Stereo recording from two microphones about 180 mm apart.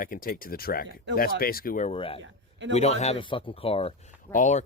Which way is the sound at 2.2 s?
90° right.